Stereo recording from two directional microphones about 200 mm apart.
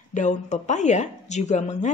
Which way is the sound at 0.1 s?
35° left (ahead or behind).